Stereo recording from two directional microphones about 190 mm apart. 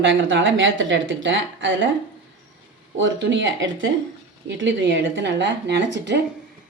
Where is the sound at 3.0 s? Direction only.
75° right (ahead or behind).